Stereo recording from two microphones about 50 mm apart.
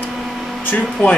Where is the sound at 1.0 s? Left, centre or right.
Left.